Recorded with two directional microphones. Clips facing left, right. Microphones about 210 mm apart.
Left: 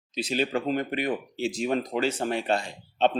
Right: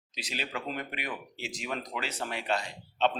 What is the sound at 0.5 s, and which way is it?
Speech, 35° left (ahead or behind).